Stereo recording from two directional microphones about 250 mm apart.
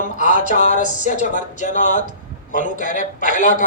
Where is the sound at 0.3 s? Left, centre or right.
Left.